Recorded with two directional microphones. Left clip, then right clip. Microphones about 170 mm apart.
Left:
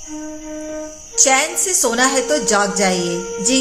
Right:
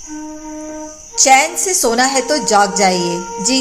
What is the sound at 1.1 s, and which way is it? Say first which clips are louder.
A woman's voice: right 5 dB; 20° right (ahead or behind).